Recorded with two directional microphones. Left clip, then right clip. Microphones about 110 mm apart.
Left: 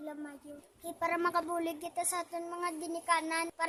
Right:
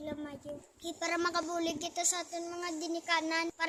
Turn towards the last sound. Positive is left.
turn(degrees=45)  # may be behind; listen again after turning